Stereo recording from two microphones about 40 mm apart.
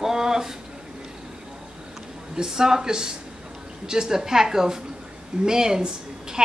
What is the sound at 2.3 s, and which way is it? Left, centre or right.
Speech, centre.